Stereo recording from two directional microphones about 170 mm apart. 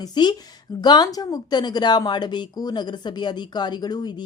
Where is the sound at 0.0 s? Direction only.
25° left (ahead or behind).